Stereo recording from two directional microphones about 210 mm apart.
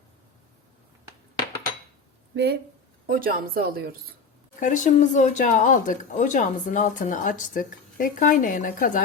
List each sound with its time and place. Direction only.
2.3 s speech: 50° right (ahead or behind)
4.6 s speech: 35° left (ahead or behind)